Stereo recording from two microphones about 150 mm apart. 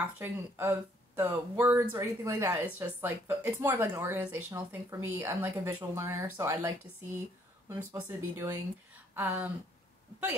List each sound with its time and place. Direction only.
0.0 s speech: 15° right (ahead or behind)
7.9 s speech: 20° right (ahead or behind)